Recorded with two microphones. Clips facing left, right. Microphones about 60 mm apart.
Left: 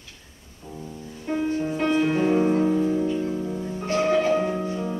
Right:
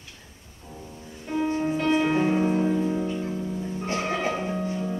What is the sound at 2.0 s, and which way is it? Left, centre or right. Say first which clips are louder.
Music: left 1 dB; centre.